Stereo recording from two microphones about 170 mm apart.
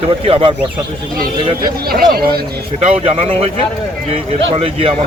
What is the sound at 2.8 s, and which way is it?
Speech, 35° right (ahead or behind).